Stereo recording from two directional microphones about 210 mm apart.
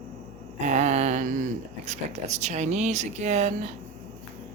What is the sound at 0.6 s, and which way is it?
Speech, 35° right (ahead or behind).